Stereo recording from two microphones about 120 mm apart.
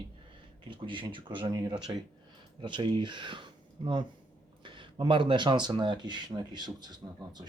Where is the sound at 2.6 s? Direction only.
40° right (ahead or behind).